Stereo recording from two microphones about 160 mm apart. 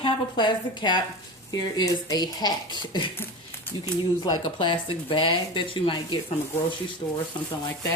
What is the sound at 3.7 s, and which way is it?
Speech, 10° left (ahead or behind).